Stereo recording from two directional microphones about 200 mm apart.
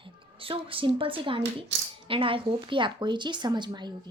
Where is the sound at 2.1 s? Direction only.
25° right (ahead or behind).